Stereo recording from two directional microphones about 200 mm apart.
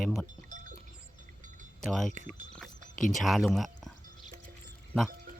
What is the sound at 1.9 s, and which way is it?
Speech, centre (ahead or behind).